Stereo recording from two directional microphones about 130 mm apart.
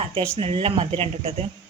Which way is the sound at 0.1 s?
45° right (ahead or behind).